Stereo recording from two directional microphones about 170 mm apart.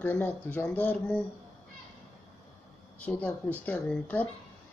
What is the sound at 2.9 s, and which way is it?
Speech, 10° left (ahead or behind).